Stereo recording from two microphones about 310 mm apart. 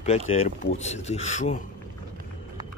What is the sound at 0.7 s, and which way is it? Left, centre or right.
Speech, left.